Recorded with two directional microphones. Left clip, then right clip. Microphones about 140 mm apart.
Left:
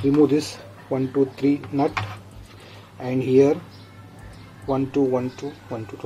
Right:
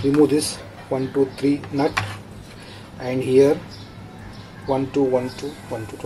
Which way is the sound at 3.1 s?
25° left (ahead or behind).